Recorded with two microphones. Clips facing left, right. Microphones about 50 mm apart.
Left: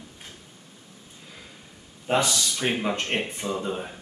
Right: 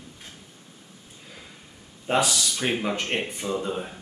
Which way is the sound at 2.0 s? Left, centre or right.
Centre.